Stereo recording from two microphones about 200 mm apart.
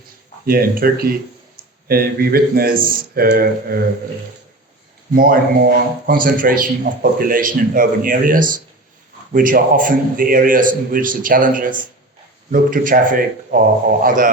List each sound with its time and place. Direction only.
0.4 s a man's voice: 50° right (ahead or behind)
5.1 s a man's voice: 45° right (ahead or behind)